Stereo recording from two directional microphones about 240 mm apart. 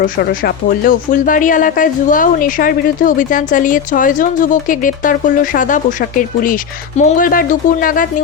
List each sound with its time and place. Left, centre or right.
0.2 s speech: left